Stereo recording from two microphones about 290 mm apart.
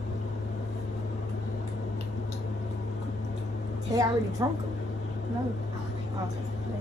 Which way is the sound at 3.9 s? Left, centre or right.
Centre.